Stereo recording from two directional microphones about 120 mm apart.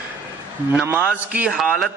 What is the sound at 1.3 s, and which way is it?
Speech, 5° right (ahead or behind).